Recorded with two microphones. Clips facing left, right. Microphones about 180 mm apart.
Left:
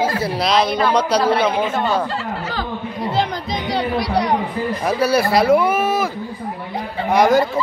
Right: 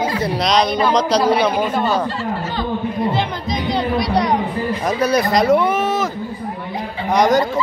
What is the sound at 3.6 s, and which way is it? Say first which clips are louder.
Speech: right 1 dB; 10° left (ahead or behind).